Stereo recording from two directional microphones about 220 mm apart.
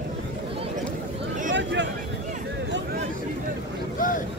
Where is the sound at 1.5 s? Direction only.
55° right (ahead or behind).